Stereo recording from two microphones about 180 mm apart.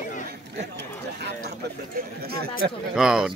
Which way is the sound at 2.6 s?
75° right (ahead or behind).